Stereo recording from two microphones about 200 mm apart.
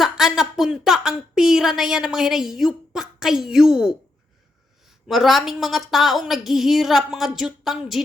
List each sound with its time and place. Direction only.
0.0 s a woman's voice: centre (ahead or behind)
5.0 s a woman's voice: centre (ahead or behind)